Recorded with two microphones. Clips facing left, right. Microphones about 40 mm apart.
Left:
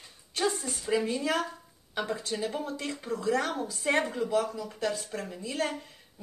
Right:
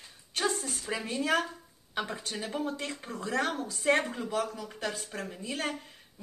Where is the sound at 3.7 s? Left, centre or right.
Centre.